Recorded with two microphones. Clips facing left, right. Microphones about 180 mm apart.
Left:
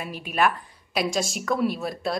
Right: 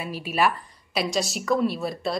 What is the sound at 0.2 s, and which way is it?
A woman's voice, 5° right (ahead or behind).